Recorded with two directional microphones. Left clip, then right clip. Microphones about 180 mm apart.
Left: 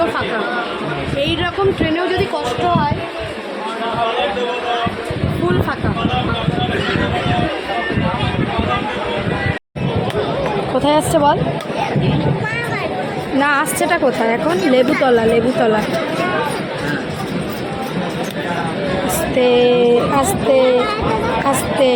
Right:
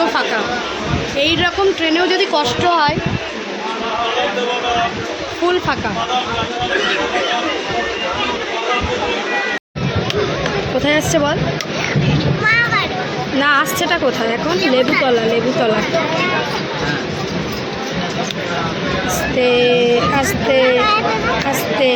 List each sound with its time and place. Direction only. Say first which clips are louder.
1.2 s speech: right 4 dB; centre (ahead or behind)
1.9 s speech: right 3 dB; 25° right (ahead or behind)
10.8 s speech: left 3 dB; 5° left (ahead or behind)
13.4 s speech: right 1 dB; 5° left (ahead or behind)
19.4 s speech: left 1 dB; 15° left (ahead or behind)